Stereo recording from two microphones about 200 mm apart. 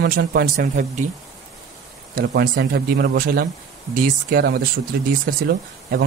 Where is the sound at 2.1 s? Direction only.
50° right (ahead or behind).